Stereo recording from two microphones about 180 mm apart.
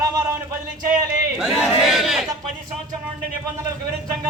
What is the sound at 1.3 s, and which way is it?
Speech, centre (ahead or behind).